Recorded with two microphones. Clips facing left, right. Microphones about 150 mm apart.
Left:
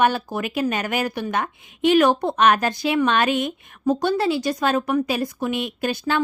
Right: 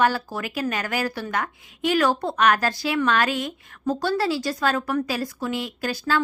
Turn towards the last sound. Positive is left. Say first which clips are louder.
# left 2 dB
turn(degrees=20)  # may be behind; listen again after turning